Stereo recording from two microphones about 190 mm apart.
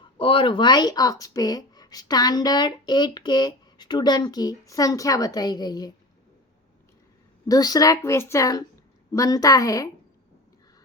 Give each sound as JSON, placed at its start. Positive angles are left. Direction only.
{"t": 0.2, "sound": "speech", "side_deg": 25}
{"t": 7.4, "sound": "a woman's voice", "side_deg": 20}